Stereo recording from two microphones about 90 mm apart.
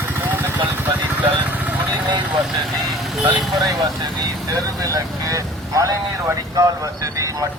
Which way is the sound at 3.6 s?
50° right (ahead or behind).